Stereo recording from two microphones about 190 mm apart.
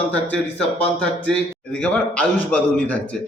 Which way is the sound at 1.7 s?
5° left (ahead or behind).